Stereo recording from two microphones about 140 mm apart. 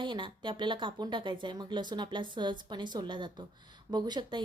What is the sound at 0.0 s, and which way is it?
A woman's voice, 35° right (ahead or behind).